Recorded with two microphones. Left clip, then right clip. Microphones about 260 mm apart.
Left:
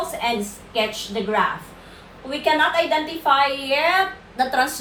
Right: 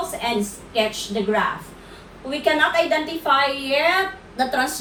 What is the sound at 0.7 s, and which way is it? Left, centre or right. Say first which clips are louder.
A woman's voice: right 1 dB; centre.